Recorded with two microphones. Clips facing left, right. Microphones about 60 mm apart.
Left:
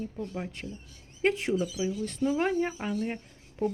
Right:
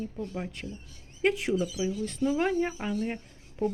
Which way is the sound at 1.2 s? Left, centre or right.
Left.